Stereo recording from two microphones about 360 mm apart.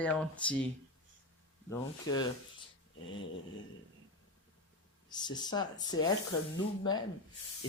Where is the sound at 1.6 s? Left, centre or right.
Centre.